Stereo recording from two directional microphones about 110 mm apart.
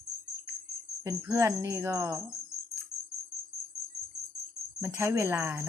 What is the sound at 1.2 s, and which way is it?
Speech, 25° right (ahead or behind).